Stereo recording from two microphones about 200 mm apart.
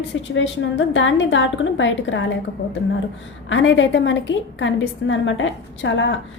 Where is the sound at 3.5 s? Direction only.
70° left (ahead or behind).